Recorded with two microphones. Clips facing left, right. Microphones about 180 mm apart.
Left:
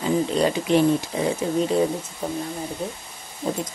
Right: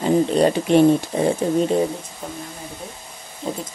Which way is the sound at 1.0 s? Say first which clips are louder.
Right 4 dB; 30° right (ahead or behind).